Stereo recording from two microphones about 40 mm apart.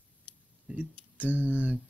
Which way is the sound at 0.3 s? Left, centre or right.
Left.